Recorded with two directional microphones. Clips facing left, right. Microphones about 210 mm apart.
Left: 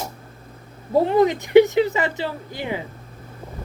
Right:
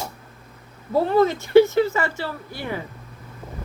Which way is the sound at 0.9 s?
15° left (ahead or behind).